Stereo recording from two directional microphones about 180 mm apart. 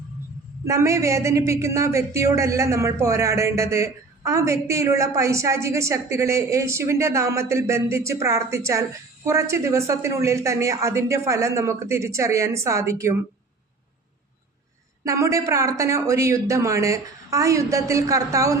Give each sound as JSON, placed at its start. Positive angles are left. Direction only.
{"t": 0.6, "sound": "speech", "side_deg": -15}
{"t": 15.0, "sound": "speech", "side_deg": -15}